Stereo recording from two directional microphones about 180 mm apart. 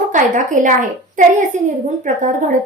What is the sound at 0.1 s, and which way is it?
A woman's voice, 45° right (ahead or behind).